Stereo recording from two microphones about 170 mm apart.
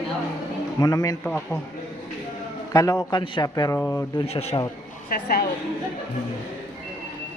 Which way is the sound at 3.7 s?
10° left (ahead or behind).